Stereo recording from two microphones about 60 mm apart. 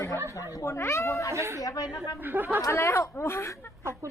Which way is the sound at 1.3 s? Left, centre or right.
Right.